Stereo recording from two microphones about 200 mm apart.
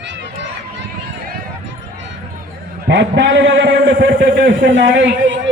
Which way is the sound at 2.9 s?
60° right (ahead or behind).